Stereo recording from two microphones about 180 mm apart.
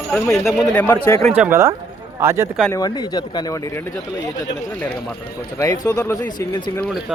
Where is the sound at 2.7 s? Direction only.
20° left (ahead or behind).